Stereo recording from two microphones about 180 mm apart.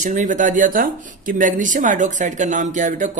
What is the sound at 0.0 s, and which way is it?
Speech, 45° right (ahead or behind).